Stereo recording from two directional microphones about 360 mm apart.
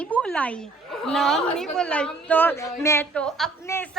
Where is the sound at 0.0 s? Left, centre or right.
Centre.